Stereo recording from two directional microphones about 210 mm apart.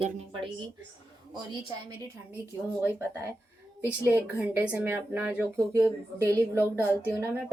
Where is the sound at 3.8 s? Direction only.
10° right (ahead or behind).